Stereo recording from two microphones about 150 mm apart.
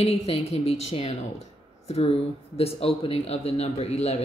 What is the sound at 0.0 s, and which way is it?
A woman's voice, 40° left (ahead or behind).